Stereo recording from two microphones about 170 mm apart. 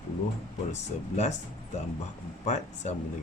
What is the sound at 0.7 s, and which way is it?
Speech, 40° left (ahead or behind).